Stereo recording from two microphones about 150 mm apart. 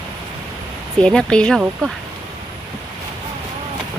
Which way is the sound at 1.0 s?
5° left (ahead or behind).